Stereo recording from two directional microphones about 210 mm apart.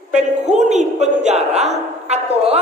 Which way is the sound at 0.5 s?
35° right (ahead or behind).